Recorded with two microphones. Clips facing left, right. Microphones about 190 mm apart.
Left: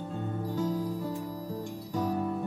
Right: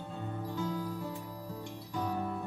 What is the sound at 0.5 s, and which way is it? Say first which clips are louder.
Music: left 5 dB; 40° left (ahead or behind).